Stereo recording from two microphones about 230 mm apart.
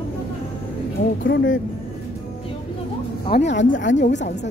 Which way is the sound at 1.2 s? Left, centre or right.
Left.